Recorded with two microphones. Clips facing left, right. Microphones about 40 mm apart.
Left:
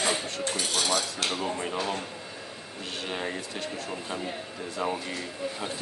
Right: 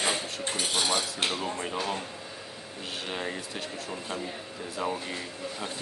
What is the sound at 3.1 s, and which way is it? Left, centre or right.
Speech, centre.